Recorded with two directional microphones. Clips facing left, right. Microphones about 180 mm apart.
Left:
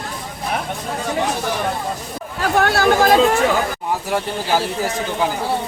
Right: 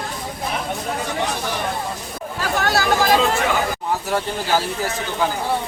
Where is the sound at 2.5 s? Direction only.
55° left (ahead or behind).